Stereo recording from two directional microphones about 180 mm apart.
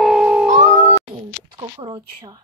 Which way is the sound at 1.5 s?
25° right (ahead or behind).